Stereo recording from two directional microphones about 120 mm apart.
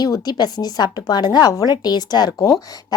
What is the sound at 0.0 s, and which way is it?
A woman's voice, 35° left (ahead or behind).